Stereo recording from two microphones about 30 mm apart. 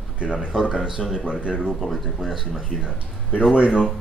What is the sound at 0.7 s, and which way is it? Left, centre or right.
Speech, right.